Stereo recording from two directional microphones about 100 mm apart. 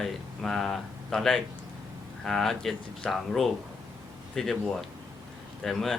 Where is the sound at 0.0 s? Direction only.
5° left (ahead or behind).